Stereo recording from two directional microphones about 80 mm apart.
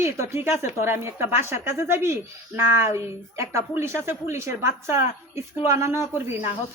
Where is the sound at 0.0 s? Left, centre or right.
Right.